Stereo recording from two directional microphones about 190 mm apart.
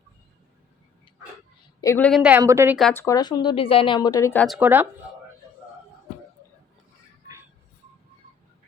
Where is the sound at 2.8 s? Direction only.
5° left (ahead or behind).